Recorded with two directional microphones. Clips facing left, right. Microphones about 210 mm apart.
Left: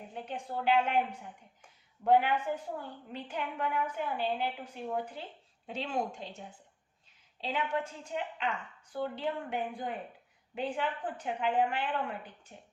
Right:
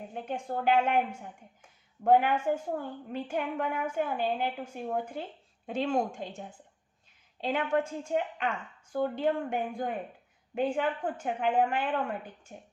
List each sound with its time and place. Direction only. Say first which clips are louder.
0.1 s a woman's voice: right 4 dB; 45° right (ahead or behind)
7.4 s a woman's voice: right 5 dB; 50° right (ahead or behind)